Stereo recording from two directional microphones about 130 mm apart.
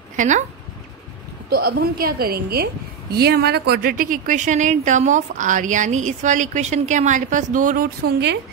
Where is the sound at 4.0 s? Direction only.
90° right.